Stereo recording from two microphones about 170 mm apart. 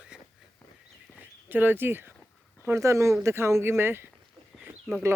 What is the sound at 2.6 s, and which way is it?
Speech, 15° right (ahead or behind).